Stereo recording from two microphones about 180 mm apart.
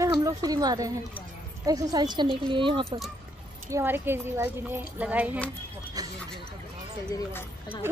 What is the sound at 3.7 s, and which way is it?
A woman's voice, 10° right (ahead or behind).